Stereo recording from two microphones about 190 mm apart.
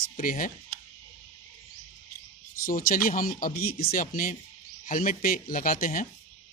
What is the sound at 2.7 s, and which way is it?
Speech, 45° left (ahead or behind).